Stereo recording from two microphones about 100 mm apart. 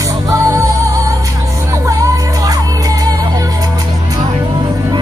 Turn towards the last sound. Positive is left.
turn(degrees=-40)  # may be behind; listen again after turning